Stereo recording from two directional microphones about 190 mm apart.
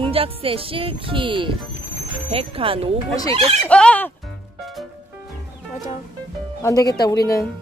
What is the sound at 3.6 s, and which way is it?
Speech, 5° left (ahead or behind).